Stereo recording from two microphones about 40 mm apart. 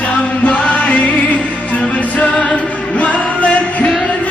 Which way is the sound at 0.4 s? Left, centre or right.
Left.